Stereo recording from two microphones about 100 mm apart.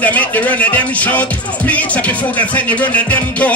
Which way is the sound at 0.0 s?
15° left (ahead or behind).